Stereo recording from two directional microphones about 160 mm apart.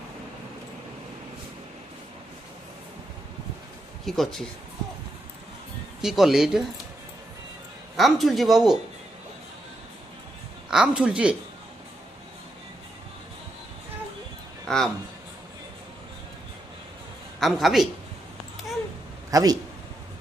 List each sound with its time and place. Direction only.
4.0 s speech: centre (ahead or behind)
6.0 s speech: centre (ahead or behind)
7.9 s speech: centre (ahead or behind)
10.7 s speech: 5° right (ahead or behind)
14.7 s speech: 5° left (ahead or behind)
17.4 s speech: centre (ahead or behind)
19.3 s a man's voice: 25° right (ahead or behind)